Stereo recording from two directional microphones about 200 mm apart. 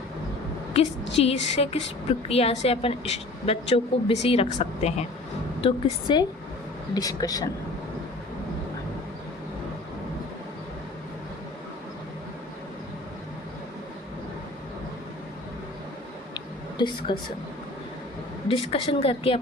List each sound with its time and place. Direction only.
1.1 s a woman's voice: 30° left (ahead or behind)
16.3 s a sound: 20° left (ahead or behind)
18.4 s a woman's voice: 30° left (ahead or behind)